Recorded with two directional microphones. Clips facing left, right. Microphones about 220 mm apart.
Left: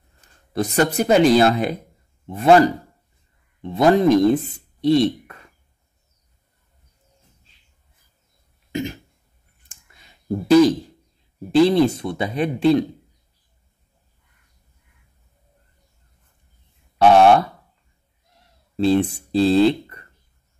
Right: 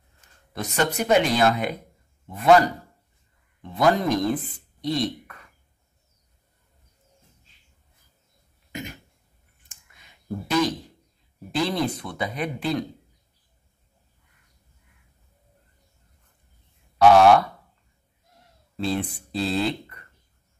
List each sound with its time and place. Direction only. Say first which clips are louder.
0.5 s speech: left 6 dB; 35° left (ahead or behind)
3.7 s speech: left 7 dB; 25° left (ahead or behind)
9.7 s a sound: left 3 dB; 35° left (ahead or behind)
11.5 s speech: left 10 dB; 25° left (ahead or behind)
17.0 s speech: left 2 dB; 30° left (ahead or behind)
18.8 s speech: left 9 dB; 25° left (ahead or behind)